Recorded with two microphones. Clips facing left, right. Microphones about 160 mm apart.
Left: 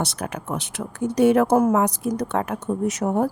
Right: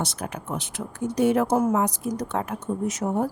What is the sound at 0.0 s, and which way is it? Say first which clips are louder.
Speech: left 3 dB; 70° left (ahead or behind).